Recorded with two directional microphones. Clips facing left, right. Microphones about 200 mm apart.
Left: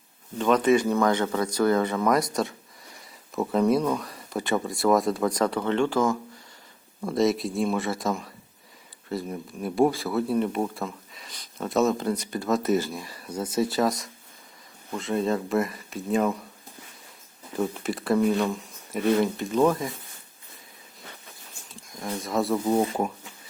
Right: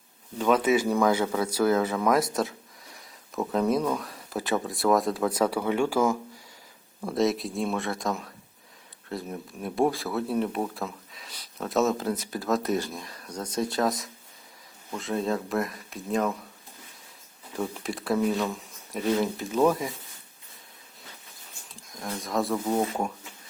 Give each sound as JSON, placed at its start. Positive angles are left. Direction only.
{"t": 0.3, "sound": "speech", "side_deg": -5}
{"t": 17.5, "sound": "speech", "side_deg": 0}
{"t": 21.7, "sound": "a sound", "side_deg": 0}
{"t": 22.2, "sound": "speech", "side_deg": 0}